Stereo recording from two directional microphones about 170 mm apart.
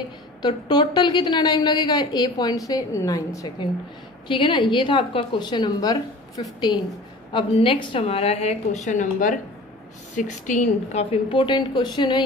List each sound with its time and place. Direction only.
0.4 s a woman's voice: 25° left (ahead or behind)